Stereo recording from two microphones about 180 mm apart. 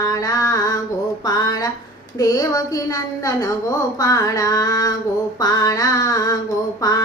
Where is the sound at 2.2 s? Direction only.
20° left (ahead or behind).